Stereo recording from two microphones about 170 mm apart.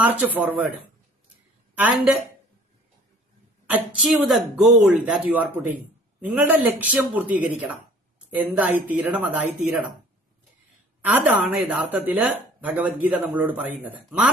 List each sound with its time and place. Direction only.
0.0 s a man's voice: 10° right (ahead or behind)
1.7 s a woman's voice: 10° right (ahead or behind)
3.7 s a man's voice: 5° right (ahead or behind)
11.0 s a man's voice: 10° right (ahead or behind)